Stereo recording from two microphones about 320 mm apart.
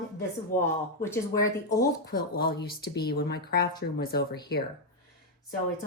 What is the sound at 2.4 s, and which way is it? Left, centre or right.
Speech, left.